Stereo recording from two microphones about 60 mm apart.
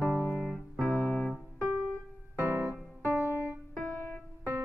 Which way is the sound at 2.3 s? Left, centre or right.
Right.